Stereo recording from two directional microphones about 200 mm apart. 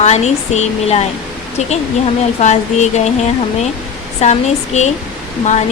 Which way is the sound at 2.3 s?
35° left (ahead or behind).